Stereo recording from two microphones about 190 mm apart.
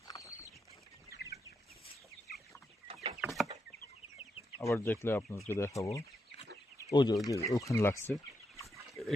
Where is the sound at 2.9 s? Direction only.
30° right (ahead or behind).